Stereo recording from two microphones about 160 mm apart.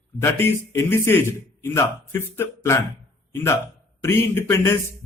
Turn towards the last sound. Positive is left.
turn(degrees=15)  # may be behind; listen again after turning